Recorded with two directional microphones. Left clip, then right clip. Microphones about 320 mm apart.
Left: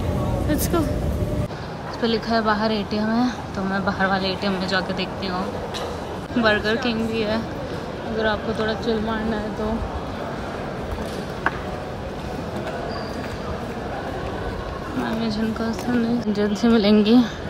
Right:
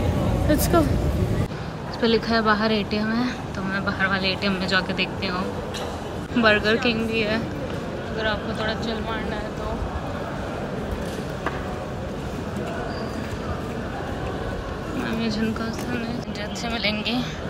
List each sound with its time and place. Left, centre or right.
0.5 s speech: centre
2.0 s a woman's voice: centre
6.3 s a woman's voice: centre
15.0 s a woman's voice: centre